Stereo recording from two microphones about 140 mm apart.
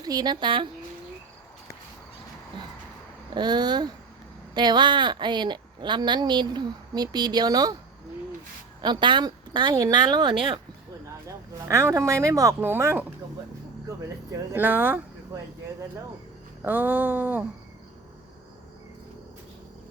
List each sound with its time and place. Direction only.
0.0 s a woman's voice: 30° right (ahead or behind)
3.2 s a woman's voice: 30° right (ahead or behind)
8.8 s a woman's voice: 35° right (ahead or behind)
11.7 s speech: 20° right (ahead or behind)
14.5 s a sound: 15° right (ahead or behind)
16.6 s a sound: 15° right (ahead or behind)